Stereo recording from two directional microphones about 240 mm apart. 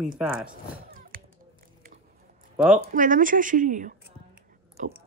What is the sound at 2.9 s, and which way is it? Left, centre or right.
Speech, right.